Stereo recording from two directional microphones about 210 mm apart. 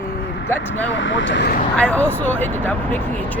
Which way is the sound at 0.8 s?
65° left (ahead or behind).